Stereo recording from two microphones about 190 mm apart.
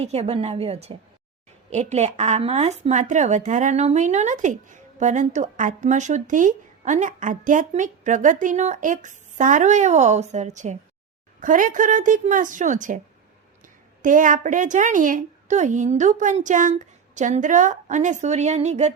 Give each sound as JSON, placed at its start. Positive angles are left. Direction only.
{"t": 0.0, "sound": "speech", "side_deg": -35}
{"t": 14.0, "sound": "speech", "side_deg": -45}